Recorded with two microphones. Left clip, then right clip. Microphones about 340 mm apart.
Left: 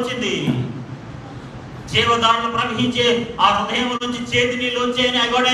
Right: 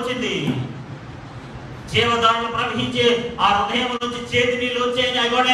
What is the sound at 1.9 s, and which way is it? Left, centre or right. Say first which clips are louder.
A man's voice: left 1 dB; left.